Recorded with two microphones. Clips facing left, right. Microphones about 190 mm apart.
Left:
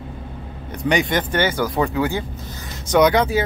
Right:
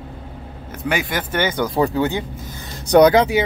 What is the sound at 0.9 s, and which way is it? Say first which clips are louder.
Speech: left 3 dB; 5° right (ahead or behind).